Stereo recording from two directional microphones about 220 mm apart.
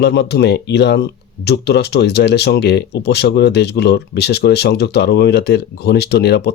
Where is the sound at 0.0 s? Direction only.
50° left (ahead or behind).